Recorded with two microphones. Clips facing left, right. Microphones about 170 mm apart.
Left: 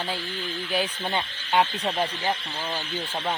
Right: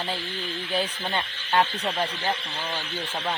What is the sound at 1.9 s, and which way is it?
Speech, centre (ahead or behind).